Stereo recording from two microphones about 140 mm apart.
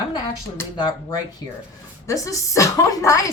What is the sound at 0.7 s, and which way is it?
A woman's voice, 30° left (ahead or behind).